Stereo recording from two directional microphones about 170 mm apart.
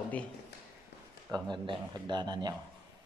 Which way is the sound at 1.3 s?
25° right (ahead or behind).